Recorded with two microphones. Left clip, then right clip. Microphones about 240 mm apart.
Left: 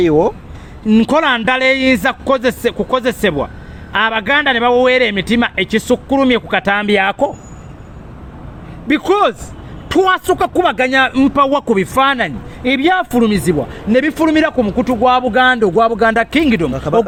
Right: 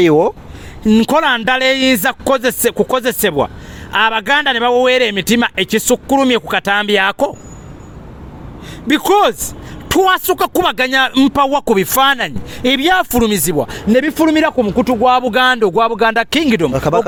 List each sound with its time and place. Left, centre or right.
0.0 s speech: right
8.9 s speech: right